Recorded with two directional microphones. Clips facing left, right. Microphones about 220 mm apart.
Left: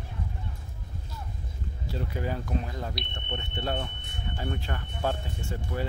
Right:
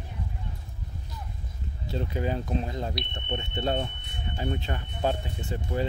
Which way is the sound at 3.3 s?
25° right (ahead or behind).